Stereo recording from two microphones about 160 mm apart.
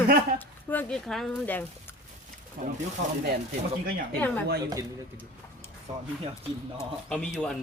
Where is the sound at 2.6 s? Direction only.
60° right (ahead or behind).